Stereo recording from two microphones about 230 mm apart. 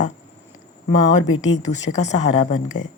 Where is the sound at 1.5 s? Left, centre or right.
Left.